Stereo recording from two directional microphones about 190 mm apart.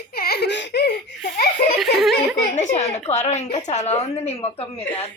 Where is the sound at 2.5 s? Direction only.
40° left (ahead or behind).